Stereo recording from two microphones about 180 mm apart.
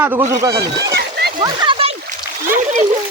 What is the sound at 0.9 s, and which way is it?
Splash, 60° right (ahead or behind).